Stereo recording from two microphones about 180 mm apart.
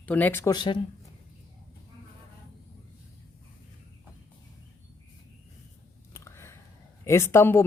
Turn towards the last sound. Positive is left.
turn(degrees=15)  # may be behind; listen again after turning